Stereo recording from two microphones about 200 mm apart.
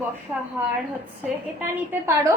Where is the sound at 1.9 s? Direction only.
15° right (ahead or behind).